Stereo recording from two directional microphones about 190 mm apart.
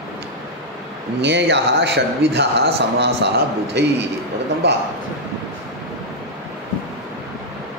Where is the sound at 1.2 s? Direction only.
65° right (ahead or behind).